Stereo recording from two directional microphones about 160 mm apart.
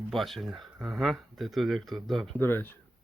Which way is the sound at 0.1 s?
Centre (ahead or behind).